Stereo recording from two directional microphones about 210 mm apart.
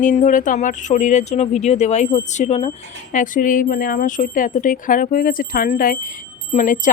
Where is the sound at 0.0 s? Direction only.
40° left (ahead or behind).